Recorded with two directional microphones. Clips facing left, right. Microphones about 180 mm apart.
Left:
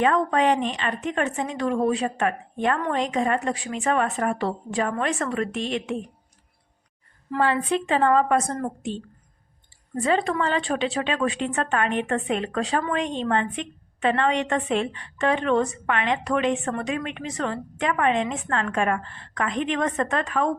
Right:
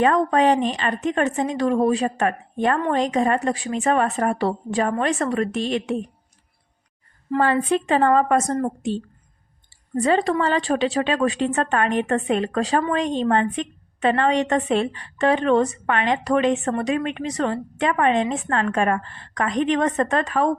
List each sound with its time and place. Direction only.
0.0 s a woman's voice: 40° right (ahead or behind)
7.3 s a woman's voice: 45° right (ahead or behind)
10.0 s a woman's voice: 35° right (ahead or behind)